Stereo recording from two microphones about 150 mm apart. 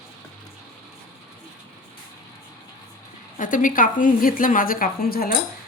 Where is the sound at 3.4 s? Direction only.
65° left (ahead or behind); by 5.3 s 80° left.